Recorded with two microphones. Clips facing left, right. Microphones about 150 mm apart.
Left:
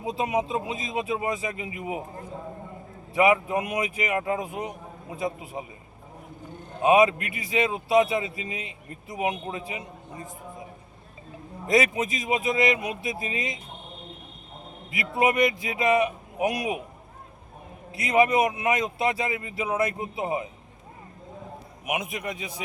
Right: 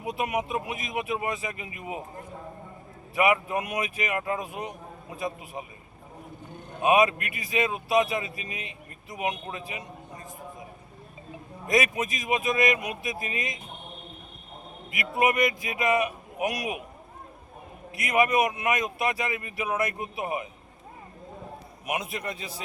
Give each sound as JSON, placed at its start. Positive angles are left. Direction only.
{"t": 0.0, "sound": "a man's voice", "side_deg": 25}
{"t": 3.2, "sound": "a man's voice", "side_deg": 25}
{"t": 6.8, "sound": "a man's voice", "side_deg": 25}
{"t": 11.6, "sound": "a man's voice", "side_deg": 25}
{"t": 15.2, "sound": "a man's voice", "side_deg": 25}
{"t": 17.9, "sound": "a man's voice", "side_deg": 25}
{"t": 21.8, "sound": "a man's voice", "side_deg": 15}